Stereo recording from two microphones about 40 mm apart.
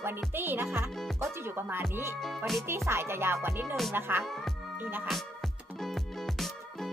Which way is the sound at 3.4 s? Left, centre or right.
Right.